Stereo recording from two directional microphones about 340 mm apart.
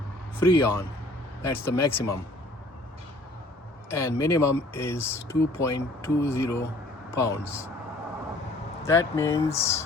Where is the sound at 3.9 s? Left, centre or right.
Centre.